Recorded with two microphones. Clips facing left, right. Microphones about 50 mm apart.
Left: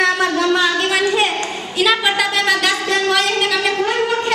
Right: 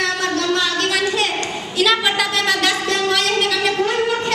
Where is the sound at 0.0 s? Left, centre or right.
Centre.